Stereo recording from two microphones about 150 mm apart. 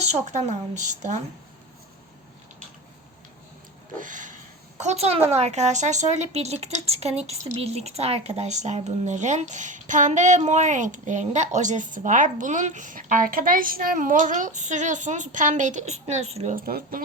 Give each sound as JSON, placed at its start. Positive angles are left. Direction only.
{"t": 0.0, "sound": "speech", "side_deg": -50}
{"t": 3.9, "sound": "a sound", "side_deg": -60}
{"t": 4.8, "sound": "speech", "side_deg": -50}
{"t": 16.6, "sound": "speech", "side_deg": -75}